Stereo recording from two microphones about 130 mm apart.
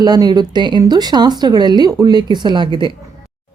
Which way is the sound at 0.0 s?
30° right (ahead or behind).